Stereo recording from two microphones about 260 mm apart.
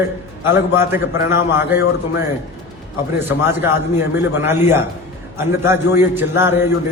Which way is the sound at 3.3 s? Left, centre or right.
Centre.